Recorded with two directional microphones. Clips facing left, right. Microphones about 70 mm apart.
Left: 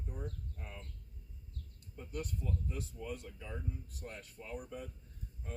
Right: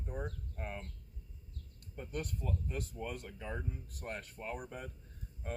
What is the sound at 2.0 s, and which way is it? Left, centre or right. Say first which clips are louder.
Speech: right 1 dB; right.